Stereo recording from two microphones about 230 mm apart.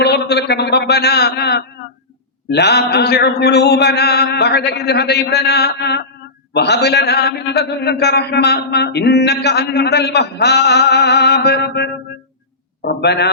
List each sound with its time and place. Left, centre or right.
0.0 s a man's voice: left